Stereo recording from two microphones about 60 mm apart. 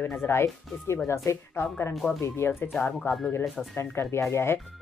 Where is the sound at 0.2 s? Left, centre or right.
Left.